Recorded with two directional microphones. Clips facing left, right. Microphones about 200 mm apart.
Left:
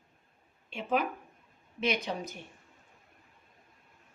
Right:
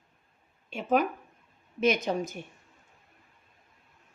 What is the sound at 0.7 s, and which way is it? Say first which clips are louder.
Speech: right 5 dB; 45° right (ahead or behind).